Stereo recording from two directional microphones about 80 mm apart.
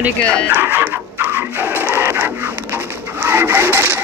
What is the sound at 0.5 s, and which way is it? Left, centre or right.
Printer, centre.